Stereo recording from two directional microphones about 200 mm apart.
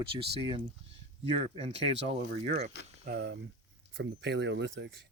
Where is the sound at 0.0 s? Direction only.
25° right (ahead or behind).